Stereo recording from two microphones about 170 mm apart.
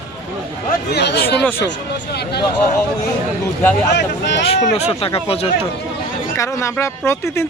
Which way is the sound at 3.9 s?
90° left.